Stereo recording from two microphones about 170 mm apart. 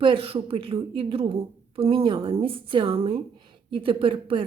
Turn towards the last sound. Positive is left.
turn(degrees=-30)  # may be behind; listen again after turning